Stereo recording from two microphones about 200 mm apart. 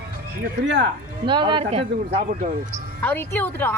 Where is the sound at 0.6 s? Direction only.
65° right (ahead or behind).